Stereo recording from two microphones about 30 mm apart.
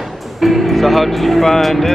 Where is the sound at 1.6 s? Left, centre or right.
Centre.